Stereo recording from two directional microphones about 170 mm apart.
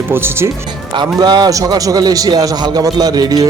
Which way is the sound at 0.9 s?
25° right (ahead or behind).